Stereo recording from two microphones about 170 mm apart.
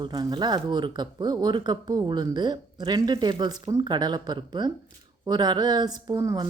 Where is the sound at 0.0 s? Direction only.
25° right (ahead or behind).